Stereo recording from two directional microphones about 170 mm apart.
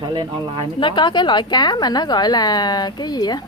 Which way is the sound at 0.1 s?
30° right (ahead or behind).